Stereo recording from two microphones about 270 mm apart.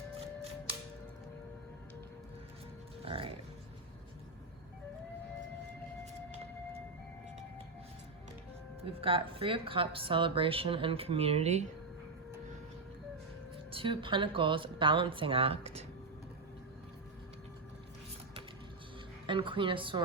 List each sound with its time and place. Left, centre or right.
3.0 s speech: centre
8.8 s a woman's voice: right
13.7 s a woman's voice: centre
19.3 s a woman's voice: centre